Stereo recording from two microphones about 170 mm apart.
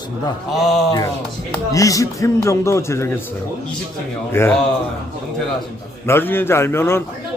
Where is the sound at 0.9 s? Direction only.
20° left (ahead or behind).